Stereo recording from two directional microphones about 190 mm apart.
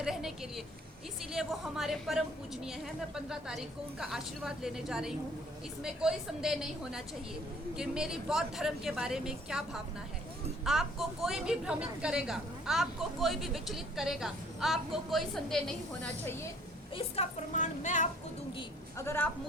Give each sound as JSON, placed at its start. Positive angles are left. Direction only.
{"t": 0.0, "sound": "a sound", "side_deg": 0}
{"t": 1.3, "sound": "a woman's voice", "side_deg": 0}
{"t": 16.9, "sound": "a woman's voice", "side_deg": 30}
{"t": 18.9, "sound": "a woman's voice", "side_deg": 15}